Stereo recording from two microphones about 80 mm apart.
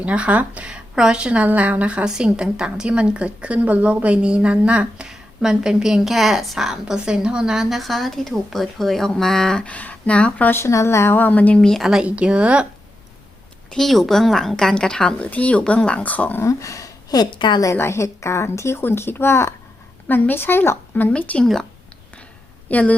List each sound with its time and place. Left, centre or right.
0.0 s a woman's voice: centre
10.5 s a woman's voice: left; by 11.6 s centre
11.6 s speech: centre
12.0 s a woman's voice: centre
13.7 s a woman's voice: centre
16.4 s speech: left
17.7 s a woman's voice: left; by 21.4 s centre
21.4 s a woman's voice: centre
22.7 s a woman's voice: centre